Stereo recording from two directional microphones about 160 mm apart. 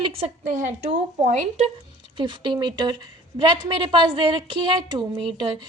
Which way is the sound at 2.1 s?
30° right (ahead or behind).